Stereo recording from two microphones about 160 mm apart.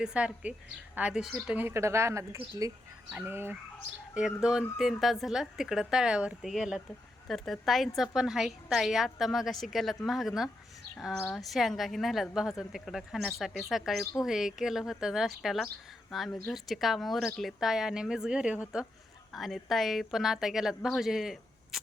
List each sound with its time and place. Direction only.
0.0 s speech: 5° right (ahead or behind)
3.1 s a woman's voice: 10° right (ahead or behind)